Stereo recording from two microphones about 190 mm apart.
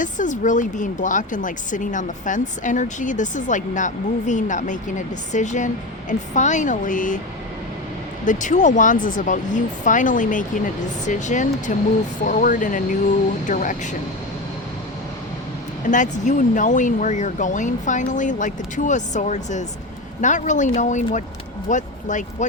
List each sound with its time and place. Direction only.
0.0 s speech: 40° left (ahead or behind)
8.2 s speech: 40° left (ahead or behind)
15.9 s speech: 40° left (ahead or behind)